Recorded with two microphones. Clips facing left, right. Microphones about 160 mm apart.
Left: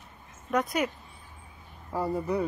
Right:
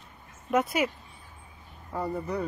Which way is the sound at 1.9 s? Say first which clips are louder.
Left 2 dB; 10° left (ahead or behind).